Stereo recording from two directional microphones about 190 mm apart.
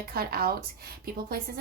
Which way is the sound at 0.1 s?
55° right (ahead or behind).